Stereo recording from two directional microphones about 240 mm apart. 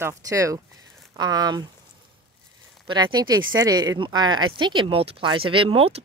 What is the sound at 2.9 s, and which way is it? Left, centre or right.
Speech, centre.